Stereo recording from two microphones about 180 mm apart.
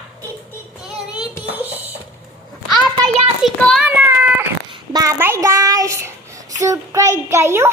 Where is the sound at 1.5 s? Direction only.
10° right (ahead or behind).